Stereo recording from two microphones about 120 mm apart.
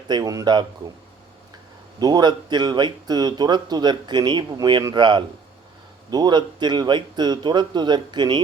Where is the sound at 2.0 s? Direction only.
35° right (ahead or behind).